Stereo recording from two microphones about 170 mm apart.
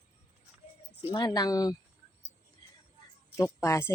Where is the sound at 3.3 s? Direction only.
15° left (ahead or behind).